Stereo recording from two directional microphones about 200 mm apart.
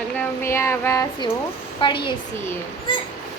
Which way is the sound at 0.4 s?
15° left (ahead or behind).